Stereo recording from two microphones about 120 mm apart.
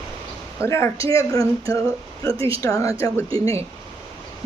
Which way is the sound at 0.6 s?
25° left (ahead or behind).